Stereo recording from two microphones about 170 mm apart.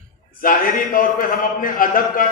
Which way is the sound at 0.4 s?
55° left (ahead or behind).